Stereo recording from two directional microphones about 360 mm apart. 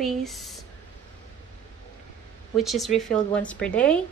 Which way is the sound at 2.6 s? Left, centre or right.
Centre.